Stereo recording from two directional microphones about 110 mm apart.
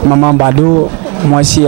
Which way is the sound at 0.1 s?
25° right (ahead or behind).